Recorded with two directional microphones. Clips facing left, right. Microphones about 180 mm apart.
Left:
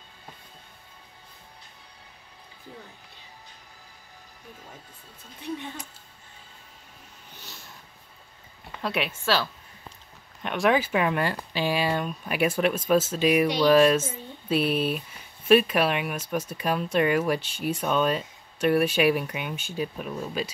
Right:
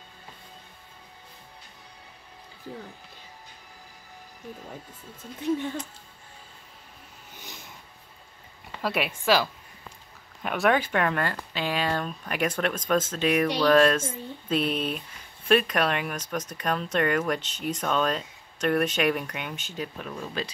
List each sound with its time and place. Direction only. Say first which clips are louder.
7.3 s a sound: right 2 dB; 15° right (ahead or behind)
8.8 s speech: right 2 dB; 5° right (ahead or behind)
10.4 s speech: left 1 dB; centre (ahead or behind)